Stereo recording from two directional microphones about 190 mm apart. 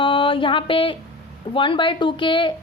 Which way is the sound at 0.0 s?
25° left (ahead or behind).